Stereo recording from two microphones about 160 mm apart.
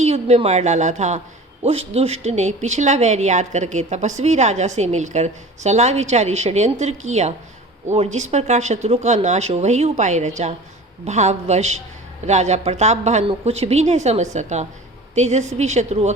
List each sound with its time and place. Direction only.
0.0 s speech: 40° right (ahead or behind)